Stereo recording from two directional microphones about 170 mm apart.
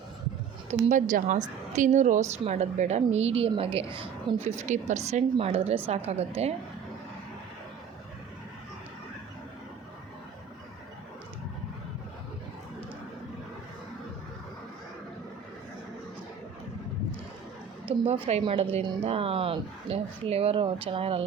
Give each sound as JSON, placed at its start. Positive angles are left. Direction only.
{"t": 0.7, "sound": "a woman's voice", "side_deg": -45}
{"t": 18.0, "sound": "a woman's voice", "side_deg": -35}